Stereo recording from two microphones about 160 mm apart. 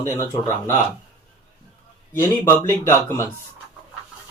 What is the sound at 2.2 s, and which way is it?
Speech, 15° left (ahead or behind).